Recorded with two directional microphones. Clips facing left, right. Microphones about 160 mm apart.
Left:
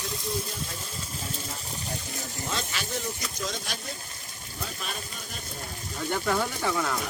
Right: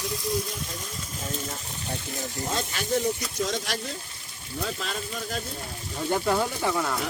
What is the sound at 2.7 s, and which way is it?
Speech, 50° right (ahead or behind).